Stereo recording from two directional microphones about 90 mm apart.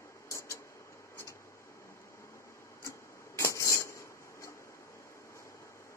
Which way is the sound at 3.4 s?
35° left (ahead or behind).